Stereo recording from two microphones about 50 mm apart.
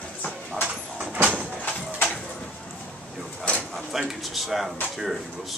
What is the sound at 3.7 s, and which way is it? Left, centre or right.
Speech, centre.